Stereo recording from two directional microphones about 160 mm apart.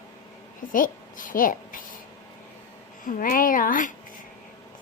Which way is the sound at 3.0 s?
55° left (ahead or behind).